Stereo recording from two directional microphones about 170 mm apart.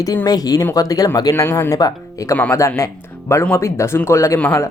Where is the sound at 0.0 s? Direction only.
20° left (ahead or behind).